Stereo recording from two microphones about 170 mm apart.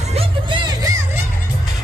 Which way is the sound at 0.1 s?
30° right (ahead or behind).